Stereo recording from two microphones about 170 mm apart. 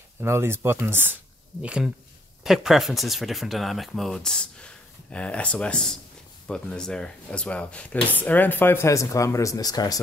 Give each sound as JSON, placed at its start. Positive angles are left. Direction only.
{"t": 0.2, "sound": "speech", "side_deg": -15}